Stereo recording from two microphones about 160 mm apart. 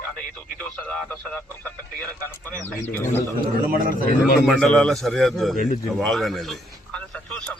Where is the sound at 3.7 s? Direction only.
60° right (ahead or behind).